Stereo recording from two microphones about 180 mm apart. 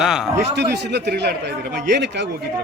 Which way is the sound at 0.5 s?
70° right (ahead or behind).